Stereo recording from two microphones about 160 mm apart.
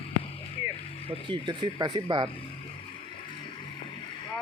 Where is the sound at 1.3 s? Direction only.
30° right (ahead or behind).